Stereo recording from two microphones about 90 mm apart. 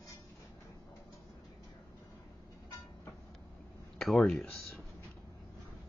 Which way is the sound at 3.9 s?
5° left (ahead or behind).